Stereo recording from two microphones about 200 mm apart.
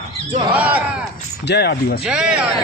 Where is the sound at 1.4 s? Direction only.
55° left (ahead or behind).